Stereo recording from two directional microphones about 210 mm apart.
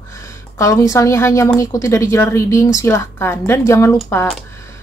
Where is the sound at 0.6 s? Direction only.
15° left (ahead or behind).